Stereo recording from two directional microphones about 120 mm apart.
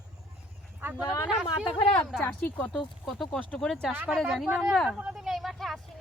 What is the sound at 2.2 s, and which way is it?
Speech, 15° left (ahead or behind).